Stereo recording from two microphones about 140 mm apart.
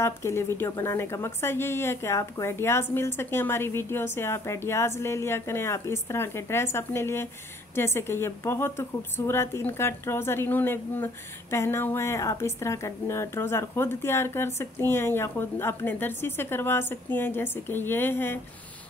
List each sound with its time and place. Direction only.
0.0 s speech: 20° left (ahead or behind)